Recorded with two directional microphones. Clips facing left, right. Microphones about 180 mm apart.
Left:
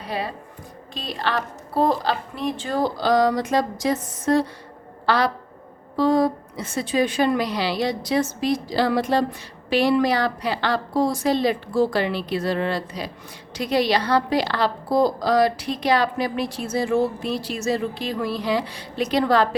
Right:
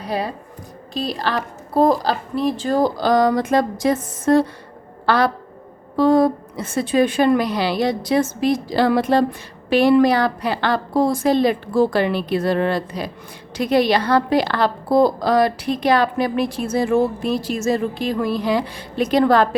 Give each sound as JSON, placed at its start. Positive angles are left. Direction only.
{"t": 0.0, "sound": "a woman's voice", "side_deg": -40}